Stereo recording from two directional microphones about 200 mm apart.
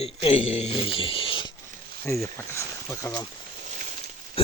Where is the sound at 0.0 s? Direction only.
30° left (ahead or behind).